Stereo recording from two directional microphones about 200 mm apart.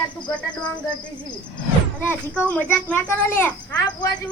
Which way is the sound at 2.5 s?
5° left (ahead or behind).